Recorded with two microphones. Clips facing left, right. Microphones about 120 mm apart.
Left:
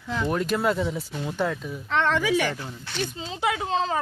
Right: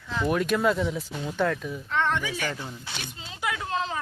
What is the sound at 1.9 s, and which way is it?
Speech, 90° left.